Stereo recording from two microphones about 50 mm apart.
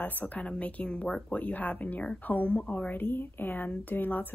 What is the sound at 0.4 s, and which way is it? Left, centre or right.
A woman's voice, left.